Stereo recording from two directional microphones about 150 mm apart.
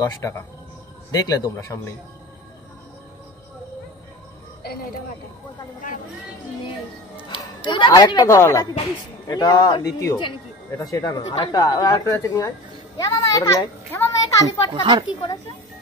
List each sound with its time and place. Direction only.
0.0 s speech: 20° left (ahead or behind)
7.2 s speech: 30° left (ahead or behind)
14.7 s speech: 35° right (ahead or behind)